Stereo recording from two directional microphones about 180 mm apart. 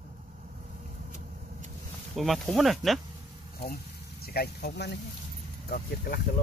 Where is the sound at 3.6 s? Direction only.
60° left (ahead or behind).